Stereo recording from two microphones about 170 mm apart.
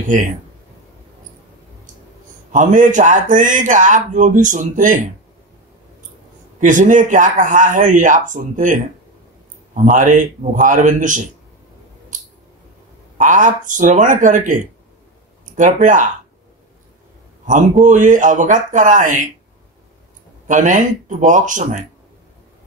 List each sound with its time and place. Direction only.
2.5 s speech: 50° right (ahead or behind)
6.6 s speech: 50° right (ahead or behind)
13.2 s speech: 50° right (ahead or behind)
17.5 s speech: 50° right (ahead or behind)
20.4 s speech: 50° right (ahead or behind)